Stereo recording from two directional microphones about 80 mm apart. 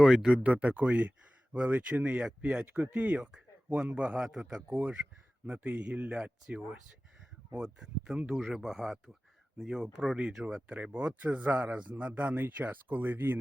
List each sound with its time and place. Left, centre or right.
0.0 s speech: centre
5.5 s speech: right